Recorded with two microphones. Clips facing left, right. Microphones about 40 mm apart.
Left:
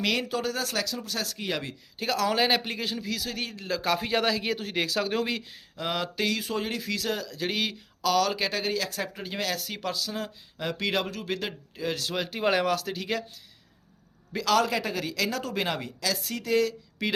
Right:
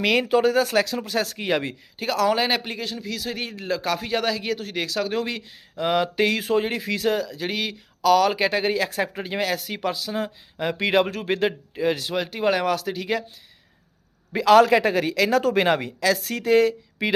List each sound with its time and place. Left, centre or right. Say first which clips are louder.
0.0 s speech: right 9 dB; right
2.0 s a man's voice: right 4 dB; centre
3.2 s speech: right 4 dB; centre
3.8 s a man's voice: even; centre
5.7 s speech: right 8 dB; centre
6.2 s speech: right 7 dB; right
7.1 s speech: right 5 dB; centre
8.3 s speech: right 6 dB; right
9.5 s speech: right 6 dB; centre
11.0 s speech: right 9 dB; right
12.1 s a man's voice: right 3 dB; centre
14.6 s a woman's voice: right 10 dB; right
17.0 s speech: right 6 dB; right